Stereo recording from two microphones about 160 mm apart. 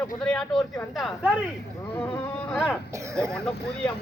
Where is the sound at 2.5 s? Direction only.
Centre (ahead or behind).